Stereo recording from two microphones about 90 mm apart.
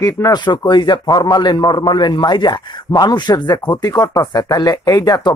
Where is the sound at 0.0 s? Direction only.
45° left (ahead or behind).